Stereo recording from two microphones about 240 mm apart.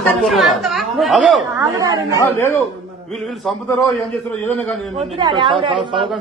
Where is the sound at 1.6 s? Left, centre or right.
Centre.